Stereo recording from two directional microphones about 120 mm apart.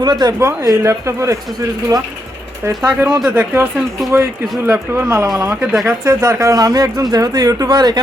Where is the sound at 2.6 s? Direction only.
25° right (ahead or behind).